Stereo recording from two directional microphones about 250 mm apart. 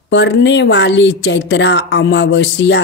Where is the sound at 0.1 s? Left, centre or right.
Left.